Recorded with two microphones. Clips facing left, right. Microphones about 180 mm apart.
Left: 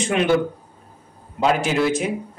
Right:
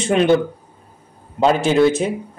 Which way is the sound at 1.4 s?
30° right (ahead or behind).